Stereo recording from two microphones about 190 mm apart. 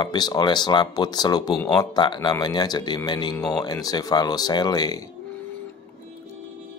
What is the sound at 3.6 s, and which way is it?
Speech, 20° left (ahead or behind).